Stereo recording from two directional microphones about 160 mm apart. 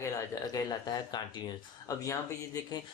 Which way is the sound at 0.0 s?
20° left (ahead or behind).